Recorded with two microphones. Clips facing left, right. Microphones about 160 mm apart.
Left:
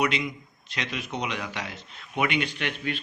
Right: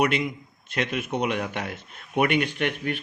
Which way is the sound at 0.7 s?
50° right (ahead or behind).